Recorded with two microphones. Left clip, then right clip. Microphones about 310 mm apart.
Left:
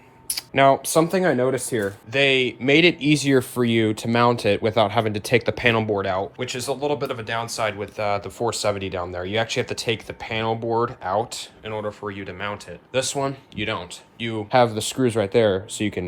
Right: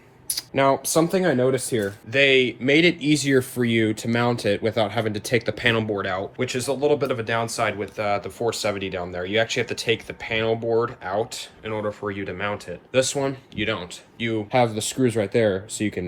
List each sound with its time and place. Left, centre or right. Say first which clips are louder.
0.3 s speech: left 3 dB; left
2.1 s speech: right 1 dB; centre